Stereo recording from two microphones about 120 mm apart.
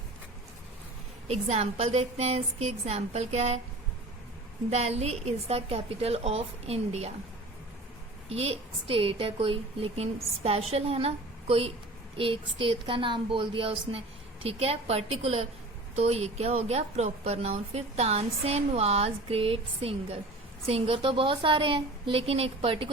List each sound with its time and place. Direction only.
1.3 s a woman's voice: 65° right (ahead or behind)
4.8 s a woman's voice: 60° right (ahead or behind)
8.3 s a woman's voice: 60° right (ahead or behind)